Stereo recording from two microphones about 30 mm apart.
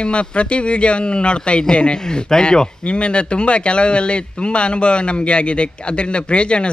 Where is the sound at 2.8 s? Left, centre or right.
Left.